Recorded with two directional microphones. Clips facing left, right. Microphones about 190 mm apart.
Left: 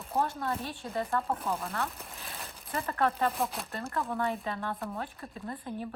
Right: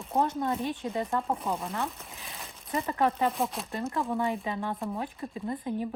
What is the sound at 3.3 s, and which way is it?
Speech, centre (ahead or behind).